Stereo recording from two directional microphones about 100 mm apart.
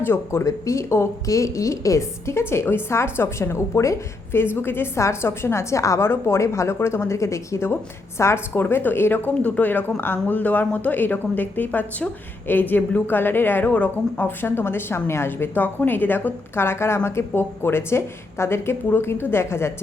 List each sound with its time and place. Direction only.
0.0 s a woman's voice: 25° left (ahead or behind)